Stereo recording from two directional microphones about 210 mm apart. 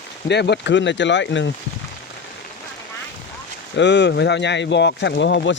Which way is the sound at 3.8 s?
55° left (ahead or behind).